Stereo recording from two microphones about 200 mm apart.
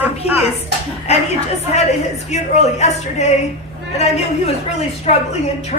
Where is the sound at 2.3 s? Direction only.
35° left (ahead or behind).